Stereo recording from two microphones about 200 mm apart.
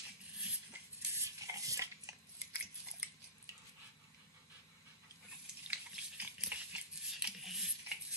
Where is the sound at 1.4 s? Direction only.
15° right (ahead or behind).